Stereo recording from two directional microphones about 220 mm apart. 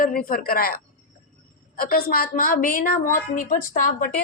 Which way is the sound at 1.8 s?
40° left (ahead or behind).